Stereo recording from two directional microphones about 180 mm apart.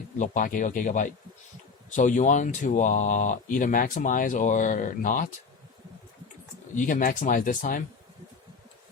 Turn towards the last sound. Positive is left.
turn(degrees=45)  # may be behind; listen again after turning